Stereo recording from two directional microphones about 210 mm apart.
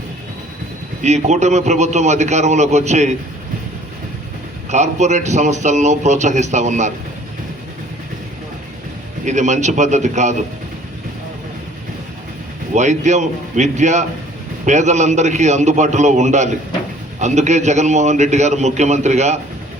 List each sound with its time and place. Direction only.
1.0 s a man's voice: 35° right (ahead or behind)
4.7 s a man's voice: 35° right (ahead or behind)
9.2 s a man's voice: 35° right (ahead or behind)
12.7 s a man's voice: 35° right (ahead or behind)